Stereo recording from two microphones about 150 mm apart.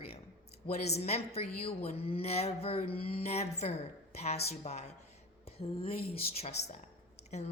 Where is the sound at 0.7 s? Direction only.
45° left (ahead or behind).